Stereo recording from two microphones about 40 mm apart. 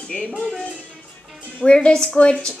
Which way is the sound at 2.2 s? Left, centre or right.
Left.